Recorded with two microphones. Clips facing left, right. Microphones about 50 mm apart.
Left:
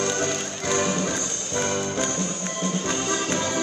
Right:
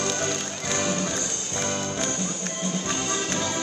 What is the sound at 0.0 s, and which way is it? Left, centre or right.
Music, left.